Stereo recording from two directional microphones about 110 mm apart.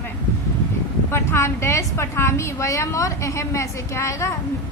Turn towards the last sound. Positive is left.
turn(degrees=25)  # may be behind; listen again after turning